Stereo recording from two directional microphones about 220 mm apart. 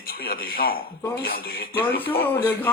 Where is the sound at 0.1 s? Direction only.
45° left (ahead or behind).